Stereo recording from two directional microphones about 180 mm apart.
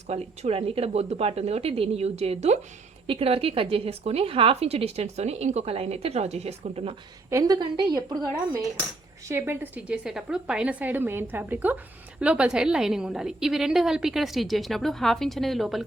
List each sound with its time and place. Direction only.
0.1 s a woman's voice: 35° right (ahead or behind)
7.3 s a woman's voice: 20° right (ahead or behind); by 15.8 s centre (ahead or behind)